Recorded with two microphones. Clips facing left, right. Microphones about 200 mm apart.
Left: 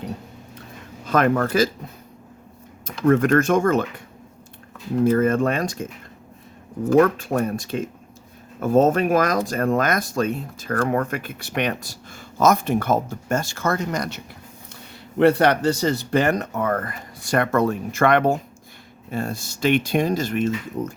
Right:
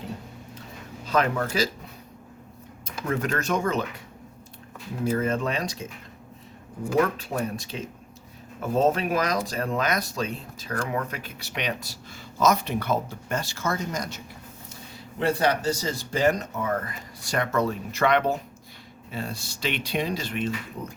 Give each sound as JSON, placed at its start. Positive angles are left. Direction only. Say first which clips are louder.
{"t": 1.0, "sound": "speech", "louder": "left 5 dB", "side_deg": 50}
{"t": 3.1, "sound": "speech", "louder": "left 10 dB", "side_deg": 50}
{"t": 5.0, "sound": "speech", "louder": "left 6 dB", "side_deg": 50}
{"t": 7.0, "sound": "speech", "louder": "left 7 dB", "side_deg": 50}
{"t": 15.2, "sound": "speech", "louder": "left 7 dB", "side_deg": 65}